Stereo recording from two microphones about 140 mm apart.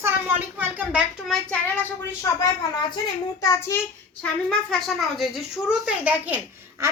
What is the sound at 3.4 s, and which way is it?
Child singing, 25° left (ahead or behind).